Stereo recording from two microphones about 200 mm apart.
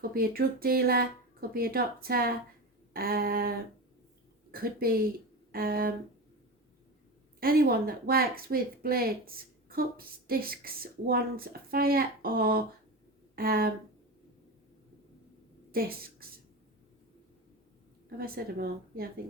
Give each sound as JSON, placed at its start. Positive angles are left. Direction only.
{"t": 0.0, "sound": "speech", "side_deg": -50}
{"t": 4.5, "sound": "speech", "side_deg": -50}
{"t": 7.3, "sound": "speech", "side_deg": -50}
{"t": 15.7, "sound": "a woman's voice", "side_deg": -50}
{"t": 18.2, "sound": "speech", "side_deg": -50}